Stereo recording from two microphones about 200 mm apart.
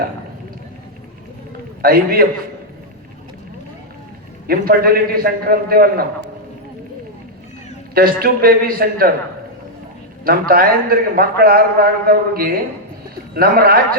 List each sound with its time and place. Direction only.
1.8 s a man's voice: 50° right (ahead or behind)
4.4 s a man's voice: 50° right (ahead or behind)
7.9 s a man's voice: 45° right (ahead or behind)
10.2 s a man's voice: 50° right (ahead or behind)